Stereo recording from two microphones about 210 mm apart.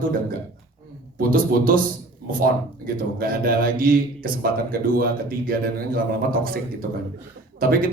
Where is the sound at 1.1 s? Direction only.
40° right (ahead or behind).